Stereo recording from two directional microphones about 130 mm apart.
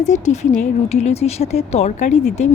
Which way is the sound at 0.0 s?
65° left (ahead or behind).